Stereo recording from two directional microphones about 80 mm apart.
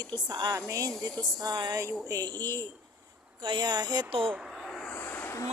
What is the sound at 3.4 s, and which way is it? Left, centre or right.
Speech, right.